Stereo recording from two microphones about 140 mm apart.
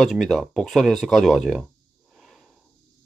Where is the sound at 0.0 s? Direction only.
Centre (ahead or behind).